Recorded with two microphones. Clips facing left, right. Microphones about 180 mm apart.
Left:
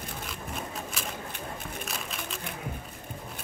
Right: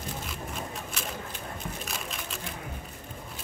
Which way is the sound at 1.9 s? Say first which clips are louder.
Even; centre (ahead or behind).